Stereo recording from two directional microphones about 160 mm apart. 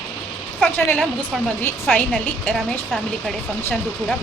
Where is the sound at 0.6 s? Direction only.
10° left (ahead or behind).